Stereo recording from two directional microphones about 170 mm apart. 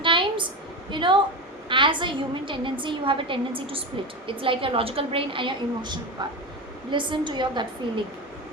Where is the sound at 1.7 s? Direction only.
30° right (ahead or behind).